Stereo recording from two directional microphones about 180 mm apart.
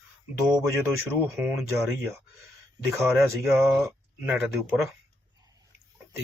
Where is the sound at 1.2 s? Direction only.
15° right (ahead or behind).